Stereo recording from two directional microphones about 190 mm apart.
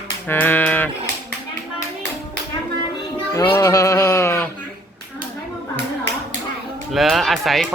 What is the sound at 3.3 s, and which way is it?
Music, 15° left (ahead or behind).